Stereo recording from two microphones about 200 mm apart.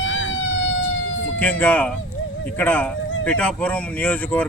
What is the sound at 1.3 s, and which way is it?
Speech, 5° left (ahead or behind).